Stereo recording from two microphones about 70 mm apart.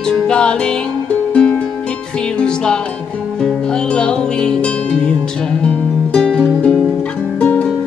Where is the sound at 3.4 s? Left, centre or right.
Centre.